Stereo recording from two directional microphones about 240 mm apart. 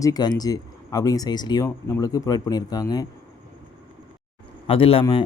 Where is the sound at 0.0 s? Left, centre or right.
Centre.